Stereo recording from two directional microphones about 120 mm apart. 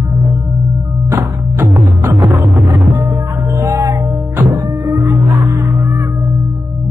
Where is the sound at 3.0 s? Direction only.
25° right (ahead or behind).